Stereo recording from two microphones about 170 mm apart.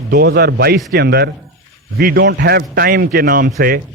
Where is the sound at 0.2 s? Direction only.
75° right (ahead or behind).